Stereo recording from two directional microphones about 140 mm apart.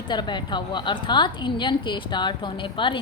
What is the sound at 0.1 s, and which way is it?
A woman's voice, 30° left (ahead or behind).